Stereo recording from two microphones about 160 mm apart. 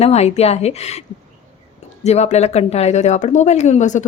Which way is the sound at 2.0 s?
45° left (ahead or behind).